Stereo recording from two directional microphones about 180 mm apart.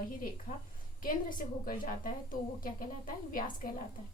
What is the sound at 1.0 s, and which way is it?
A woman's voice, 50° left (ahead or behind).